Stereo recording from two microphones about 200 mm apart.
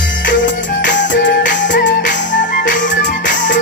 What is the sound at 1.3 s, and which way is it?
Music, 40° left (ahead or behind).